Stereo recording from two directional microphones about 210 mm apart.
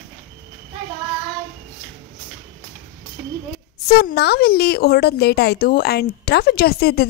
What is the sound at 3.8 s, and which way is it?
A woman's voice, 50° left (ahead or behind).